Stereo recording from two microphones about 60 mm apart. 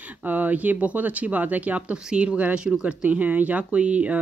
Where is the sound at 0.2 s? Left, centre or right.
Right.